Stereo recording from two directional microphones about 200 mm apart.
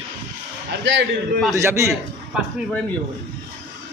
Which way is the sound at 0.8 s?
65° right (ahead or behind).